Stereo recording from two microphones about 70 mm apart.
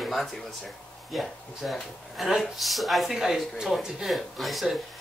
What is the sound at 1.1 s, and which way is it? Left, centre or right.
Speech, centre.